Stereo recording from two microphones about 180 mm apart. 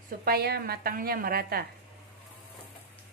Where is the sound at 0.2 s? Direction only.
60° right (ahead or behind).